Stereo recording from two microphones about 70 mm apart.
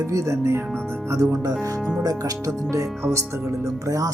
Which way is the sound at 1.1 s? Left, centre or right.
Right.